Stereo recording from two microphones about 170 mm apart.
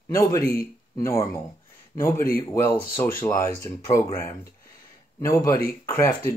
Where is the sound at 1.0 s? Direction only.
15° left (ahead or behind).